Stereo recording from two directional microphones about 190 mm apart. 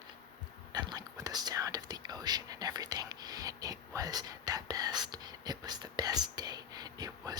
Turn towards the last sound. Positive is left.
turn(degrees=-20)  # may be behind; listen again after turning